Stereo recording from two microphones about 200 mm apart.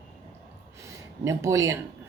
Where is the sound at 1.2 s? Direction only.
15° right (ahead or behind).